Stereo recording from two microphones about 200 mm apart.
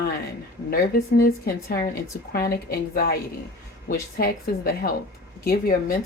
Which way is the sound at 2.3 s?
50° left (ahead or behind).